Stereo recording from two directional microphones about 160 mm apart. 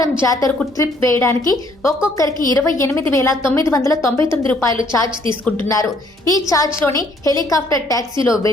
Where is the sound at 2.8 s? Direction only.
15° left (ahead or behind).